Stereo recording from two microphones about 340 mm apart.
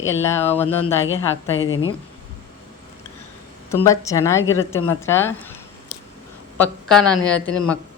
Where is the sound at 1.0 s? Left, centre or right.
Left.